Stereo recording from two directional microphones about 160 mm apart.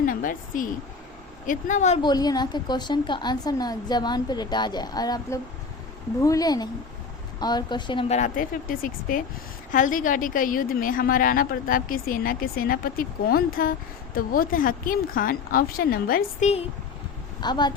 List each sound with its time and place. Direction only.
0.0 s a sound: 55° left (ahead or behind)
1.5 s speech: 50° left (ahead or behind)
2.0 s a woman's voice: 25° left (ahead or behind); by 16.5 s 65° left (ahead or behind)
17.4 s a woman's voice: 25° left (ahead or behind)